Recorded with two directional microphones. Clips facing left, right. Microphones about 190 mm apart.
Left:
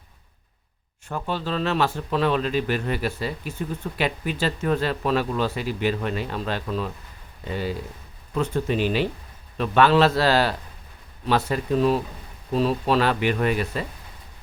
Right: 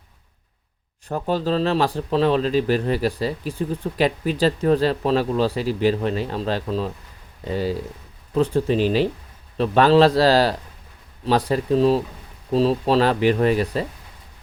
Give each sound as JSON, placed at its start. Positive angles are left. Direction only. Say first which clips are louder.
{"t": 1.0, "sound": "speech", "louder": "right 6 dB", "side_deg": -40}